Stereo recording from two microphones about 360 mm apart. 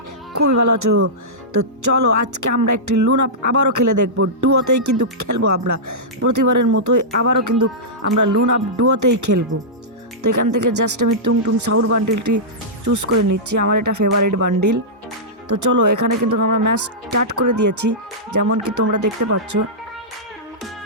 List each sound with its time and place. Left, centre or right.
0.3 s music: right
10.2 s speech: right
12.8 s music: right
15.4 s speech: right
17.3 s music: right